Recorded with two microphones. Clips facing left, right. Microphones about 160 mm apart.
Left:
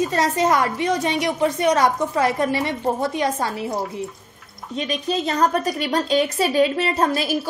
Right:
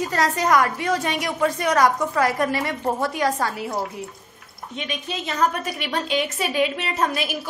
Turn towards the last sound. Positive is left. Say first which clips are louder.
# left 4 dB
turn(degrees=35)  # may be behind; listen again after turning